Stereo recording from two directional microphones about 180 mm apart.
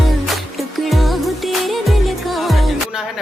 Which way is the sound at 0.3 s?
Centre (ahead or behind).